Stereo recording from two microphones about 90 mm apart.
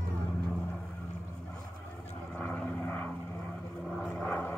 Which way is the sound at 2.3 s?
15° left (ahead or behind).